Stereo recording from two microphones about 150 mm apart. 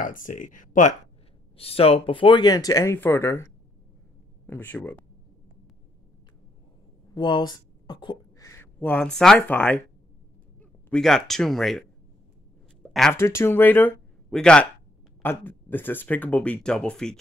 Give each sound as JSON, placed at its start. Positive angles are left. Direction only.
{"t": 0.0, "sound": "speech", "side_deg": 65}
{"t": 1.6, "sound": "speech", "side_deg": 40}
{"t": 4.5, "sound": "speech", "side_deg": 10}
{"t": 7.2, "sound": "speech", "side_deg": 30}
{"t": 8.7, "sound": "speech", "side_deg": 5}
{"t": 12.8, "sound": "a sound", "side_deg": 5}
{"t": 13.1, "sound": "speech", "side_deg": 15}